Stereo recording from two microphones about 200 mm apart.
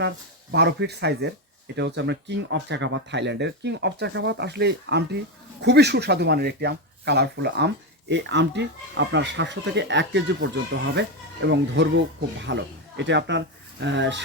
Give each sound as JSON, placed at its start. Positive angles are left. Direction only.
{"t": 0.5, "sound": "speech", "side_deg": -55}